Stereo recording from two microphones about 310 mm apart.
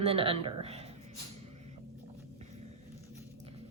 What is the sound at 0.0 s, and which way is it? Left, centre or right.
Speech, centre.